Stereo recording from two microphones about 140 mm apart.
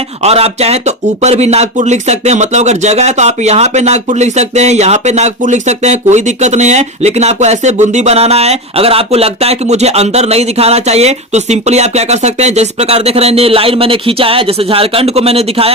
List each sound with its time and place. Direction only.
0.2 s speech: 45° right (ahead or behind)